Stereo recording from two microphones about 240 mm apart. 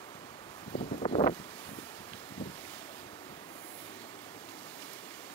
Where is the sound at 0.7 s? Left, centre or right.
Left.